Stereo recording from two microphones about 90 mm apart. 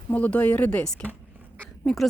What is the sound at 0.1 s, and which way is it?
Speech, 15° left (ahead or behind).